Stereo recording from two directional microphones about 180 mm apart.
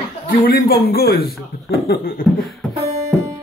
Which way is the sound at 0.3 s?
55° left (ahead or behind).